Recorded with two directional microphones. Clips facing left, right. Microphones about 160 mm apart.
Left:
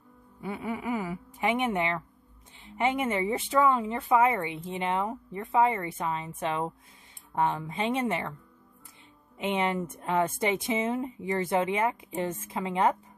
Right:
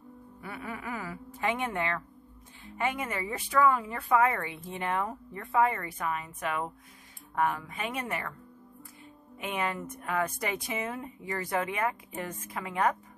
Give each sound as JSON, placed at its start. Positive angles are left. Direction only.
{"t": 0.4, "sound": "speech", "side_deg": 20}
{"t": 9.4, "sound": "speech", "side_deg": 25}